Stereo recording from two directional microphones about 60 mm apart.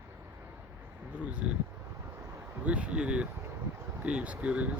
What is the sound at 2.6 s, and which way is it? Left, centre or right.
Speech, centre.